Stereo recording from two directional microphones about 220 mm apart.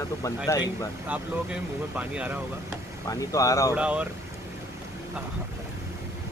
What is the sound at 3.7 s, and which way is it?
Speech, 5° right (ahead or behind).